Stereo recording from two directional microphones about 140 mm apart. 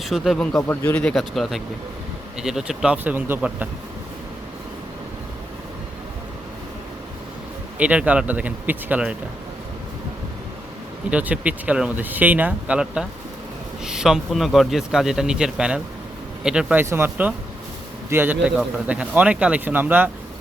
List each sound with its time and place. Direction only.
0.0 s speech: centre (ahead or behind)
0.7 s speech: 15° left (ahead or behind); by 3.7 s 15° right (ahead or behind)
7.8 s speech: 10° right (ahead or behind)
11.1 s speech: 10° right (ahead or behind)